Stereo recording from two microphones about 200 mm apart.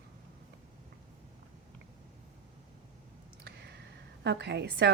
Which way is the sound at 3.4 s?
55° right (ahead or behind).